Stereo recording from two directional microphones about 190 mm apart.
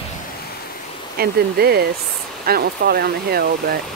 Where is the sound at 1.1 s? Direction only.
55° right (ahead or behind).